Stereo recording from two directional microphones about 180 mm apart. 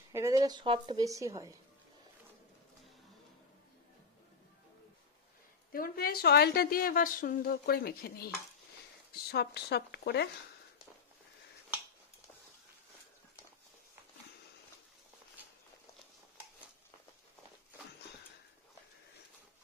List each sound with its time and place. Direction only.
0.1 s speech: 15° right (ahead or behind)
5.7 s a woman's voice: 55° left (ahead or behind)